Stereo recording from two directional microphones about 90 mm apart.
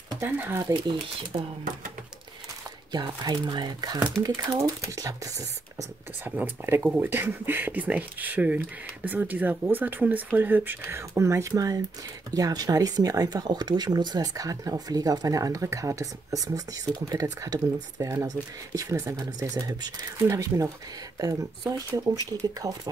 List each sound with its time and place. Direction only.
0.2 s speech: 25° right (ahead or behind)
1.3 s speech: 60° right (ahead or behind)
2.9 s speech: 50° right (ahead or behind)
4.9 s speech: 40° right (ahead or behind)
6.2 s speech: 20° right (ahead or behind); by 19.6 s 35° right (ahead or behind)
19.6 s speech: 50° right (ahead or behind)
20.2 s speech: 35° right (ahead or behind)